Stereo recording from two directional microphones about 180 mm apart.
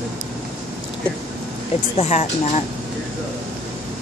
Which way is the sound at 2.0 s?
40° left (ahead or behind).